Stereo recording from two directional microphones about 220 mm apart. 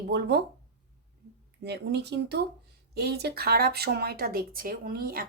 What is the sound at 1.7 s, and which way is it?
Speech, 50° right (ahead or behind).